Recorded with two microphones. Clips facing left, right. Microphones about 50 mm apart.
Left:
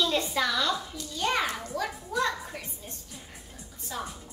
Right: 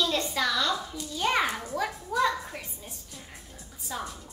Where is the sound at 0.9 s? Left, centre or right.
Centre.